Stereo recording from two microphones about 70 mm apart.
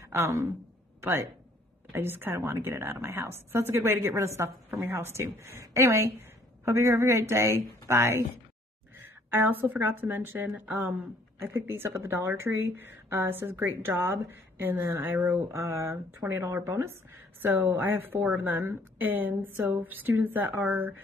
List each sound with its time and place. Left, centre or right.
1.0 s a woman's voice: right
11.3 s a woman's voice: right
15.5 s a woman's voice: right
16.2 s a woman's voice: right
16.6 s a woman's voice: right